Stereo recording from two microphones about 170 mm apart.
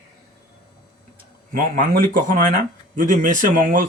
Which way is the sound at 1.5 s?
55° right (ahead or behind).